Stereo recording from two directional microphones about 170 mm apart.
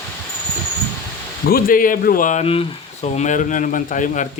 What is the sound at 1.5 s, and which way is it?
Speech, 60° left (ahead or behind).